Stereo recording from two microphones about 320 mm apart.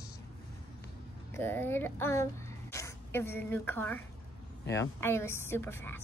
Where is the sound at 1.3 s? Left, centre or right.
Centre.